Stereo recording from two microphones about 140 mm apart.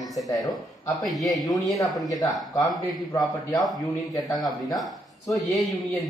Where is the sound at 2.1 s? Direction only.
25° left (ahead or behind).